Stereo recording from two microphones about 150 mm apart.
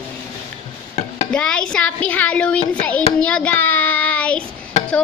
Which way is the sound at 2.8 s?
10° left (ahead or behind).